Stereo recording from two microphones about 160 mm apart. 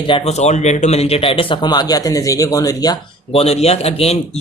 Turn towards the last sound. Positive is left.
turn(degrees=40)  # may be behind; listen again after turning